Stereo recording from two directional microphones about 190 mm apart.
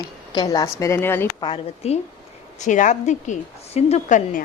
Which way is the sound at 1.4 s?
30° left (ahead or behind).